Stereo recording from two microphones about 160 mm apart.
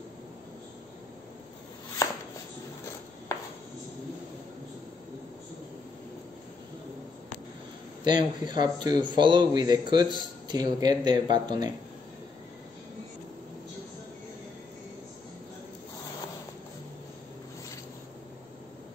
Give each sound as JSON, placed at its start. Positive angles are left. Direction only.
{"t": 8.0, "sound": "a man's voice", "side_deg": -25}